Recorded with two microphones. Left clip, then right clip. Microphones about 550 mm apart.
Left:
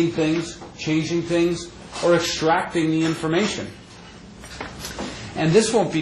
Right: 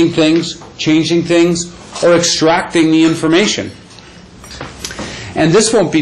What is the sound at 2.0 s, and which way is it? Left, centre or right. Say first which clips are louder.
Speech: right 8 dB; right.